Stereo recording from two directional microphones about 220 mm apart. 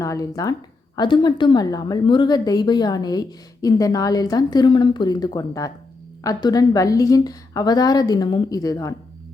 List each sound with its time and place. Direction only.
0.0 s a woman's voice: 15° left (ahead or behind)